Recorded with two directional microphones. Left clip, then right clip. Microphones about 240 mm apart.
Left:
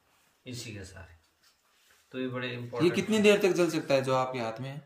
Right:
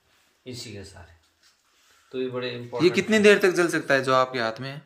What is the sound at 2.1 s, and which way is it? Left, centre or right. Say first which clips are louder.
Speech: right 6 dB; right.